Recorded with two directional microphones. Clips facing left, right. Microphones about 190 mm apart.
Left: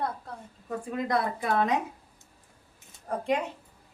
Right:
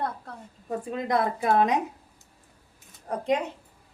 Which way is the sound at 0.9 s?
20° right (ahead or behind).